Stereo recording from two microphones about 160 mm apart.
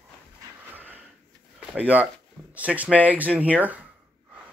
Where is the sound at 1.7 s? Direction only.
10° right (ahead or behind).